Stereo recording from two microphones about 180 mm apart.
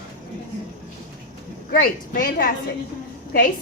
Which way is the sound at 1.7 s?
55° left (ahead or behind).